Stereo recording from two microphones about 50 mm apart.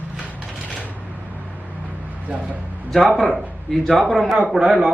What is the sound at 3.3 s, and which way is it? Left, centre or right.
Speech, centre.